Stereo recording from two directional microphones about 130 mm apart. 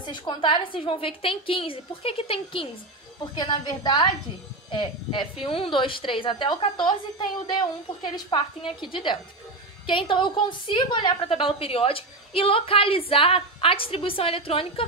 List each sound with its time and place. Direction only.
0.0 s a woman's voice: 40° left (ahead or behind)